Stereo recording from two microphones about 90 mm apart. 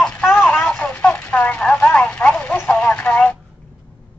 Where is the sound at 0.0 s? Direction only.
15° left (ahead or behind).